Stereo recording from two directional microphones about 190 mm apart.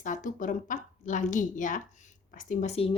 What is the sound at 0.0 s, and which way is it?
A woman's voice, 45° left (ahead or behind).